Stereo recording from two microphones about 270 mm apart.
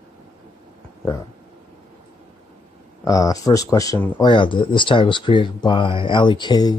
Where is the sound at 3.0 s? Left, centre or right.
Centre.